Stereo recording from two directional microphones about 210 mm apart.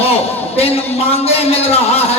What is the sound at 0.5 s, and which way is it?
Speech, 30° left (ahead or behind).